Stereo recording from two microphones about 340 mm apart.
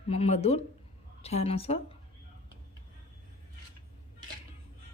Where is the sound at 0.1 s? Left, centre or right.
Centre.